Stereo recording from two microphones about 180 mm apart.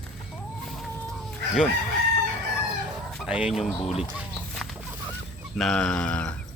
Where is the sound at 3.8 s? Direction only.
35° left (ahead or behind).